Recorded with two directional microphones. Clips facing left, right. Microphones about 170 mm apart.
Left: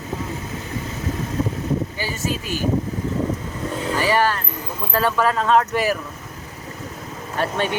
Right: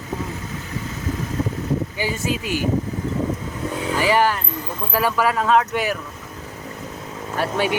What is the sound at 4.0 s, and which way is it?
Speech, 15° right (ahead or behind).